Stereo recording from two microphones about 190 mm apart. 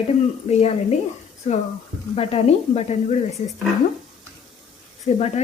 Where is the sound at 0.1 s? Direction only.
35° left (ahead or behind).